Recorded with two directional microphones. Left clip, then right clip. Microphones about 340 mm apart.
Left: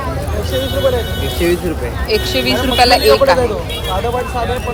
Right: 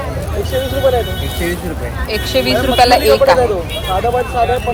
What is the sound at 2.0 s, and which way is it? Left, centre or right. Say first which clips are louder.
Speech: even; centre.